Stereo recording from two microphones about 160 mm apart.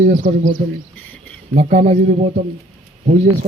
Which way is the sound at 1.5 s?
45° right (ahead or behind).